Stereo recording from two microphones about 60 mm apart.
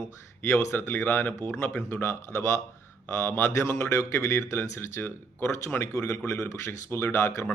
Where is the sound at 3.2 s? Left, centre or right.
Left.